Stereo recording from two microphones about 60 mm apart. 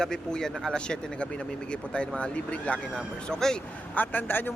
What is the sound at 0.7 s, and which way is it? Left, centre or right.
Speech, centre.